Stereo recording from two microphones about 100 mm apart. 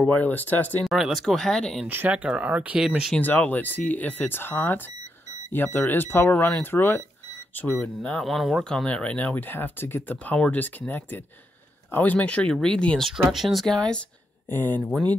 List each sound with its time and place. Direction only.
0.0 s speech: 15° left (ahead or behind)
0.8 s speech: centre (ahead or behind)
1.9 s speech: 15° right (ahead or behind)
3.2 s speech: 15° left (ahead or behind)
7.8 s speech: 10° left (ahead or behind)
8.8 s speech: 10° left (ahead or behind)
14.5 s speech: 20° left (ahead or behind)